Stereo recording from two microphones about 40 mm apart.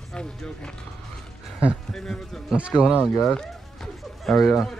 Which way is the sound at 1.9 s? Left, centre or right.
Centre.